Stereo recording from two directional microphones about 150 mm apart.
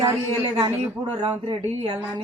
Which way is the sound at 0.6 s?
30° right (ahead or behind).